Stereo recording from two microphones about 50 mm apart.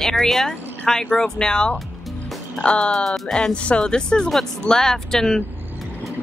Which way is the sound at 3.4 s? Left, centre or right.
Left.